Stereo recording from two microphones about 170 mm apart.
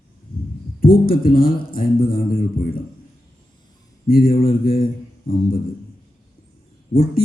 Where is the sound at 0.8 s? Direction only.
60° left (ahead or behind).